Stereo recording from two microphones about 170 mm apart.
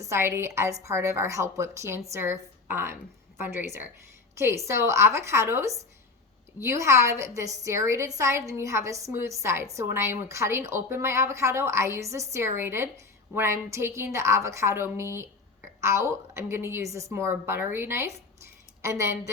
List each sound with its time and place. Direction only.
0.0 s a woman's voice: 15° right (ahead or behind)